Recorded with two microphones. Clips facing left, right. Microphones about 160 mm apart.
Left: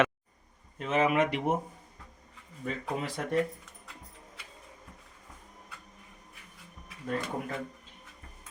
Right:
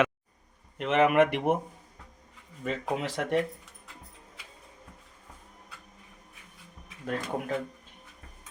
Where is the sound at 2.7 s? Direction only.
90° right.